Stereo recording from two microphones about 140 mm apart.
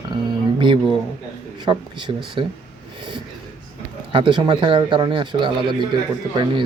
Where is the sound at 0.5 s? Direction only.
35° right (ahead or behind).